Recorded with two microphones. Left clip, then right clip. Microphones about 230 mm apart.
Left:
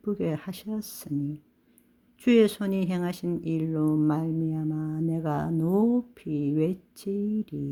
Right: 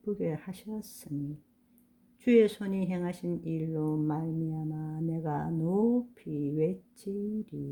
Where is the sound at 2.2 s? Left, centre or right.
Left.